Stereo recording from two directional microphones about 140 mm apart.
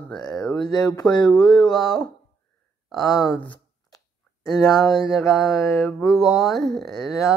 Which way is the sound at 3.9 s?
25° left (ahead or behind).